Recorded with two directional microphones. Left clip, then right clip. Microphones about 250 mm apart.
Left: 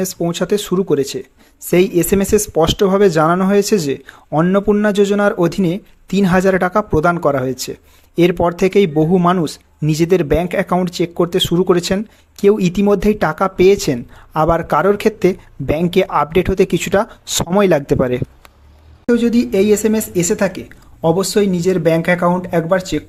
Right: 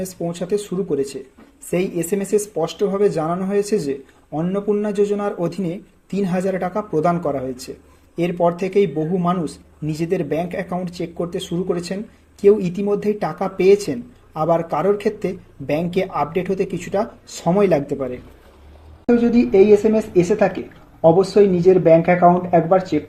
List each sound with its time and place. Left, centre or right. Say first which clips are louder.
0.0 s speech: left 7 dB; left